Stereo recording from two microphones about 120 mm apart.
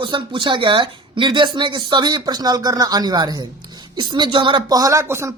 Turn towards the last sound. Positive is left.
turn(degrees=-20)  # may be behind; listen again after turning